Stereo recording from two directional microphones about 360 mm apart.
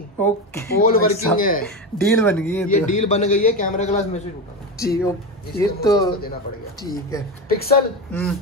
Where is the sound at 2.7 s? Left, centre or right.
Centre.